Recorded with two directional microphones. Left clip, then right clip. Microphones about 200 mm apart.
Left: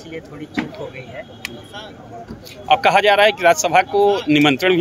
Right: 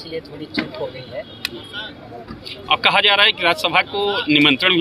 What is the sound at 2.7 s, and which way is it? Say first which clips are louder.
Speech: left 2 dB; 55° left (ahead or behind).